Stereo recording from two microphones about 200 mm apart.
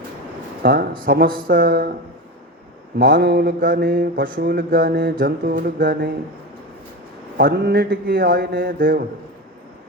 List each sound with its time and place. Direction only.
0.6 s speech: 50° right (ahead or behind)
1.0 s mantra: 50° right (ahead or behind)
3.0 s mantra: 50° right (ahead or behind)
7.3 s mantra: 50° right (ahead or behind)